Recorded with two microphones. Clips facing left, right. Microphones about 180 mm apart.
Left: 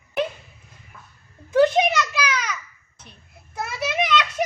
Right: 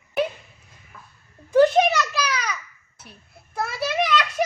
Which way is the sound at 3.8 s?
20° left (ahead or behind).